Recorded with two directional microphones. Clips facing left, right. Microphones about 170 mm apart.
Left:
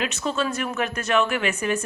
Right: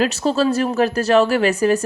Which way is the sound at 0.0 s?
35° right (ahead or behind).